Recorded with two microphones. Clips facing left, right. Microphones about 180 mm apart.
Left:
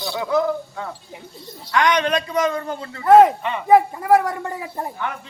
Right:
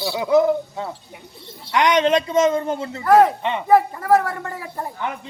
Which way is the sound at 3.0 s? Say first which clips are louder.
Left 3 dB; 25° left (ahead or behind).